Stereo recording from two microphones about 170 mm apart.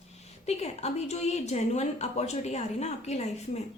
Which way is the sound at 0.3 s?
40° left (ahead or behind).